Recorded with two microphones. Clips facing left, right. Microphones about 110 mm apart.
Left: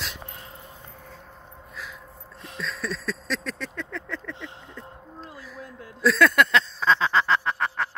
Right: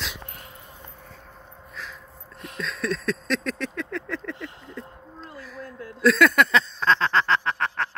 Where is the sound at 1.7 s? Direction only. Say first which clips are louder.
Right 1 dB; 5° left (ahead or behind).